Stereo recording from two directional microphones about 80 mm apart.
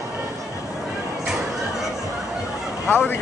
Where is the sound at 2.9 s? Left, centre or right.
Left.